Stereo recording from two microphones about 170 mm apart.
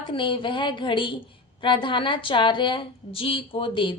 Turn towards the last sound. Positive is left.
turn(degrees=30)  # may be behind; listen again after turning